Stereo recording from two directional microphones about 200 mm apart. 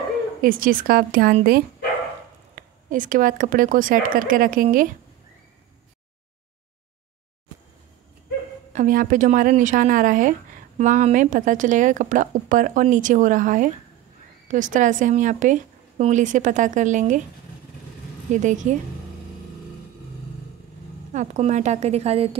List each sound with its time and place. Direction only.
0.4 s speech: 45° right (ahead or behind)
8.7 s a woman's voice: 45° right (ahead or behind)
18.3 s a woman's voice: 40° right (ahead or behind)
21.1 s a woman's voice: 35° right (ahead or behind)